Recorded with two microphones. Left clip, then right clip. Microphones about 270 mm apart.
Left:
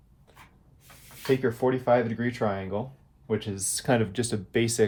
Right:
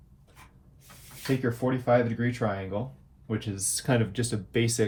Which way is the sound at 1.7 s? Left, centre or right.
Left.